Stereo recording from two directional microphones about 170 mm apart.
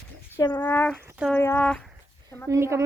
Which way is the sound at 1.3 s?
15° left (ahead or behind).